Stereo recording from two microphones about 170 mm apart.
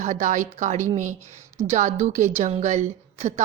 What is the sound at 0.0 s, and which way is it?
A woman's voice, 45° right (ahead or behind).